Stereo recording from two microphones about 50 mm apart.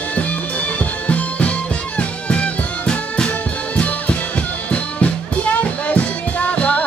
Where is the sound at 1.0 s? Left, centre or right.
Left.